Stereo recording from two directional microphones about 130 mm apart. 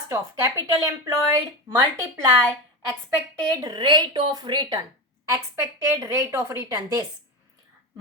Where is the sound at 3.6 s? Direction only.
30° right (ahead or behind).